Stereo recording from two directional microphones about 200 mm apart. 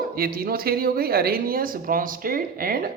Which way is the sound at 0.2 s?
45° right (ahead or behind).